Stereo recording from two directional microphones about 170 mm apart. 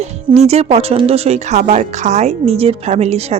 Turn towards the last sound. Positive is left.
turn(degrees=-40)  # may be behind; listen again after turning